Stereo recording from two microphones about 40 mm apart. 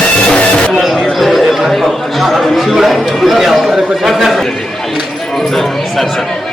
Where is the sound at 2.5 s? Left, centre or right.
Centre.